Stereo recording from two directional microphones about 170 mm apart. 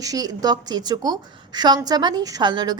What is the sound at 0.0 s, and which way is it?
A woman's voice, 20° right (ahead or behind).